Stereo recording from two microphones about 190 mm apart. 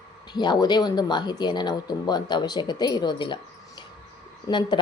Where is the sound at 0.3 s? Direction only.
25° left (ahead or behind).